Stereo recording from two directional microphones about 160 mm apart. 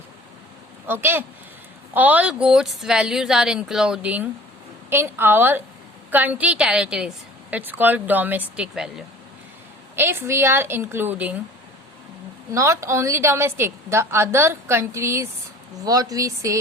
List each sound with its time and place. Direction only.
0.9 s a woman's voice: 15° right (ahead or behind)
9.9 s a woman's voice: 15° right (ahead or behind)
12.5 s a woman's voice: 20° right (ahead or behind)